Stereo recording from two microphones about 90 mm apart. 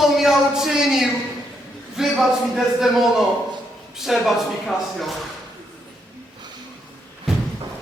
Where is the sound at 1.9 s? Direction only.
5° right (ahead or behind).